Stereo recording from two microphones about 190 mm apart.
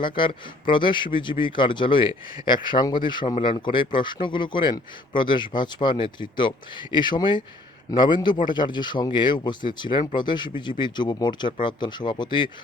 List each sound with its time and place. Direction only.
0.0 s speech: 25° left (ahead or behind)